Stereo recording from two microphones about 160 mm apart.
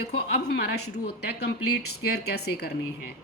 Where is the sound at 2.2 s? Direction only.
90° left.